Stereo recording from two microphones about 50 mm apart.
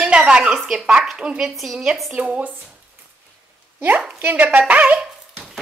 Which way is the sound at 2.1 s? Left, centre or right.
Right.